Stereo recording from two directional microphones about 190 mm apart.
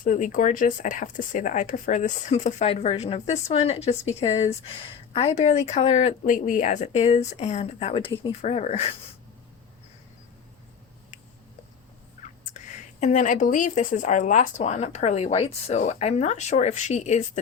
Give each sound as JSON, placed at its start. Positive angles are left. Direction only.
{"t": 0.0, "sound": "speech", "side_deg": 45}
{"t": 12.5, "sound": "speech", "side_deg": 40}